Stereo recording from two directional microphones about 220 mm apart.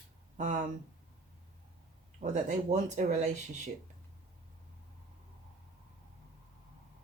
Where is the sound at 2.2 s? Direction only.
35° right (ahead or behind).